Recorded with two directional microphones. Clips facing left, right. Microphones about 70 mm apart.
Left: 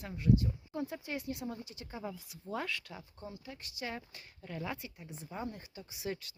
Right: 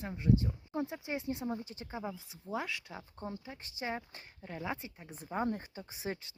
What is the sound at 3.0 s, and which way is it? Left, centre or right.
Speech, right.